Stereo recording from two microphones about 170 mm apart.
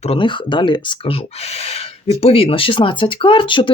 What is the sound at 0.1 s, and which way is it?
Speech, 30° left (ahead or behind).